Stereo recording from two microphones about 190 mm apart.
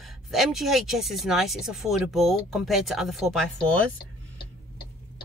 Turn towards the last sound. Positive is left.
turn(degrees=5)  # may be behind; listen again after turning